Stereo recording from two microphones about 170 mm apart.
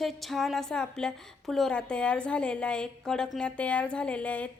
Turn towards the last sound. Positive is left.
turn(degrees=10)  # may be behind; listen again after turning